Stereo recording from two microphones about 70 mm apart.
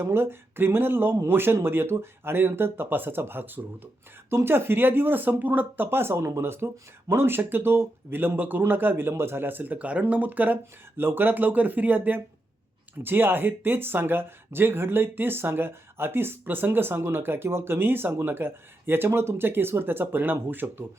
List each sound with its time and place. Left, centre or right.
0.0 s speech: right